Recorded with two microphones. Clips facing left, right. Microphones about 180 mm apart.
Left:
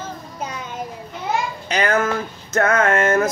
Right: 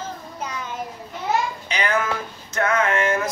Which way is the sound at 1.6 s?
45° left (ahead or behind).